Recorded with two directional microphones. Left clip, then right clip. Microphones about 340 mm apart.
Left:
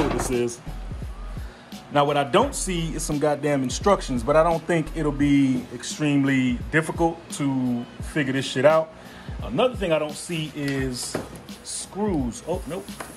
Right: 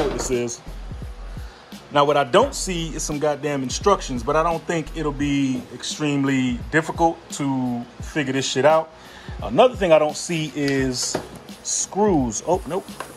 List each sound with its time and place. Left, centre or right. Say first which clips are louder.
0.2 s speech: right 1 dB; centre
2.0 s speech: right 3 dB; centre